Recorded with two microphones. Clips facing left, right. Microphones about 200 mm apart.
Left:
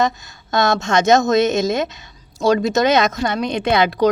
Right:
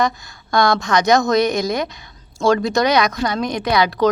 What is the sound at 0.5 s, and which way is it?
A woman's voice, 20° left (ahead or behind).